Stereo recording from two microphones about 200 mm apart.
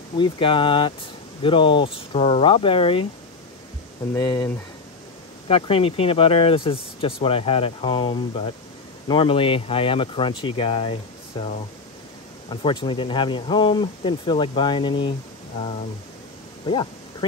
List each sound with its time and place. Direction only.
0.2 s speech: 25° left (ahead or behind)
4.1 s speech: 20° left (ahead or behind)
5.5 s speech: 30° left (ahead or behind)